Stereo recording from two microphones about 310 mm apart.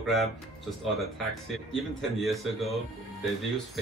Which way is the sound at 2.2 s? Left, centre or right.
Centre.